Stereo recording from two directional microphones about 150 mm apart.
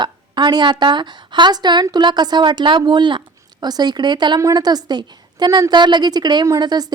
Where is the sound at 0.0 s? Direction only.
30° right (ahead or behind).